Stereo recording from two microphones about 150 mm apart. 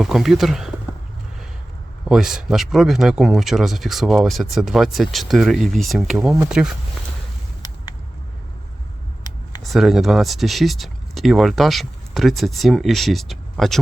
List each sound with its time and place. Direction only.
0.0 s speech: centre (ahead or behind)
2.0 s speech: 5° right (ahead or behind)
9.6 s speech: centre (ahead or behind)